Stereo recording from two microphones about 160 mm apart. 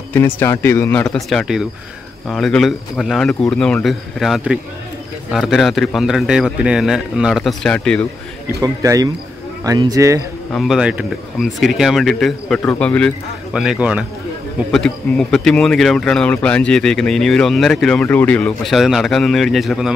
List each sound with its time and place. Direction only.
0.1 s speech: 15° left (ahead or behind)
8.5 s a man's voice: 20° right (ahead or behind)
10.5 s speech: centre (ahead or behind)
13.5 s speech: 5° right (ahead or behind)
14.7 s speech: 5° left (ahead or behind)